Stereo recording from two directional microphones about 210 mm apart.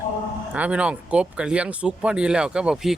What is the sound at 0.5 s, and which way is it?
Speech, 5° right (ahead or behind).